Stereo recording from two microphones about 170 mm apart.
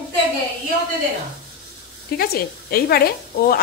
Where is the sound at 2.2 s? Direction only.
65° left (ahead or behind).